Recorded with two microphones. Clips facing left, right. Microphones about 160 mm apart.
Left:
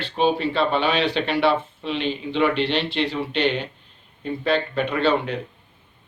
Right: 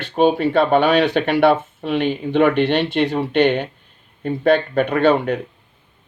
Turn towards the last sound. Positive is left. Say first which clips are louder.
# right 5 dB
turn(degrees=-50)  # may be behind; listen again after turning